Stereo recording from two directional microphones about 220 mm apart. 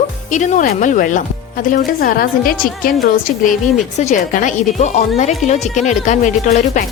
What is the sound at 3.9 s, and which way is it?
A woman's voice, 35° left (ahead or behind).